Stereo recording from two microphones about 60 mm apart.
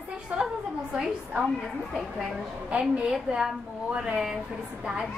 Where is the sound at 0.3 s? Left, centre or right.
Right.